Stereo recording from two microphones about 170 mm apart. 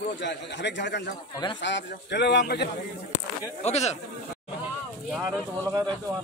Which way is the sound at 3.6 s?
40° left (ahead or behind).